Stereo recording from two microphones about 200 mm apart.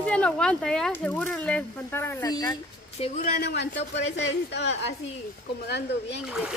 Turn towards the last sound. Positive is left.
turn(degrees=-5)  # may be behind; listen again after turning